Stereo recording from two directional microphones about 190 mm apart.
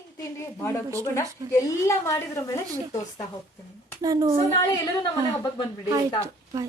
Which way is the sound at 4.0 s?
20° right (ahead or behind).